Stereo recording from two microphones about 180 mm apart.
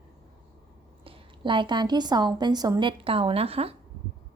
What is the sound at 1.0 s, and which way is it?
A woman's voice, 30° right (ahead or behind).